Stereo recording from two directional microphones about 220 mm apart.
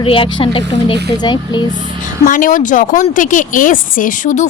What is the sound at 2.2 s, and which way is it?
Speech, 40° left (ahead or behind).